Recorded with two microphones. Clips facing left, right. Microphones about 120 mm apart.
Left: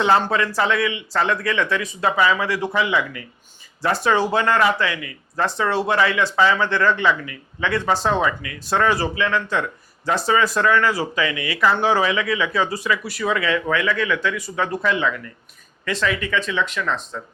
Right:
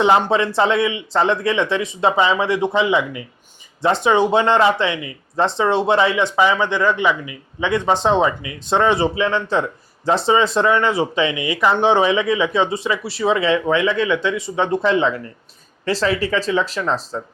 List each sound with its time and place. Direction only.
0.0 s speech: 20° right (ahead or behind)